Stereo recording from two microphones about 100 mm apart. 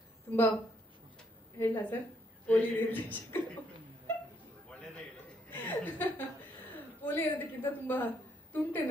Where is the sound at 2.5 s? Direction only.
20° left (ahead or behind).